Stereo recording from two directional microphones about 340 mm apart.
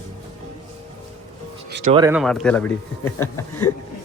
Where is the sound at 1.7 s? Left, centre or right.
Right.